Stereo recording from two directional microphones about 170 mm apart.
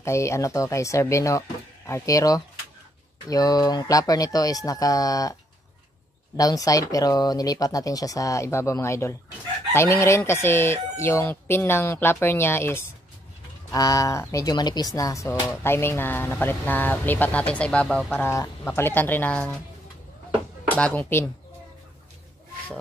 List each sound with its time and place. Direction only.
0.0 s speech: 15° left (ahead or behind)
20.6 s speech: 10° left (ahead or behind)